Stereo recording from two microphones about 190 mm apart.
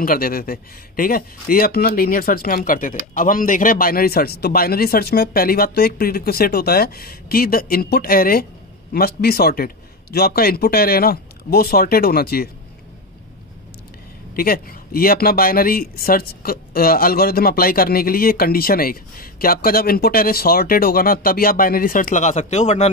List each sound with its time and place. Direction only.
0.0 s a man's voice: 50° left (ahead or behind)
14.3 s a man's voice: 50° left (ahead or behind)